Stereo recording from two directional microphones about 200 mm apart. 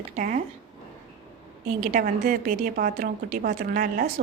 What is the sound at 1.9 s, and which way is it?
A woman's voice, 45° right (ahead or behind).